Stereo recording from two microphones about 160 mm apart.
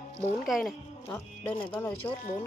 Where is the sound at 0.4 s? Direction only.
Centre (ahead or behind).